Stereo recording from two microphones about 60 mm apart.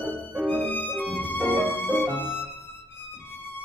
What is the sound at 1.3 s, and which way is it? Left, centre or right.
Violin, right.